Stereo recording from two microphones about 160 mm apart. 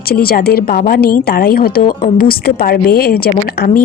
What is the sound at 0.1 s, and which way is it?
A woman's voice, 70° left (ahead or behind).